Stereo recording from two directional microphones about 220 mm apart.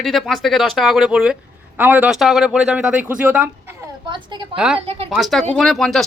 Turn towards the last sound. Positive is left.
turn(degrees=0)  # may be behind; listen again after turning